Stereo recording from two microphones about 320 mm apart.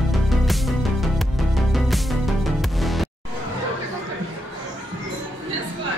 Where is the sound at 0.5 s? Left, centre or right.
Centre.